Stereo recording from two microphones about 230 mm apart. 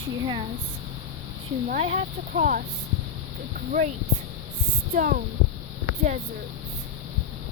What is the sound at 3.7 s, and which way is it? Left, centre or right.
Speech, right.